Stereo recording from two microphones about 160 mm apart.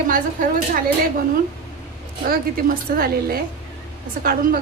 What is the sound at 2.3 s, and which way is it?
A woman's voice, 65° right (ahead or behind).